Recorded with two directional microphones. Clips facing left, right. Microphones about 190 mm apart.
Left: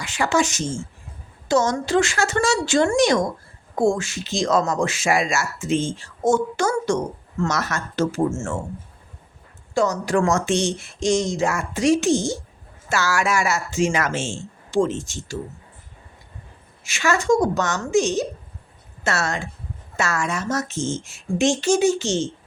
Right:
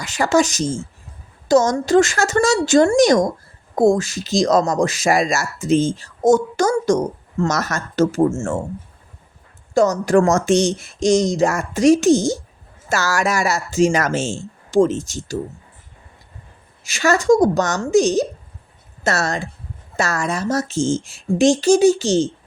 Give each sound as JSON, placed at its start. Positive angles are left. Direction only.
{"t": 0.0, "sound": "speech", "side_deg": -40}
{"t": 9.7, "sound": "speech", "side_deg": -45}
{"t": 16.8, "sound": "speech", "side_deg": -35}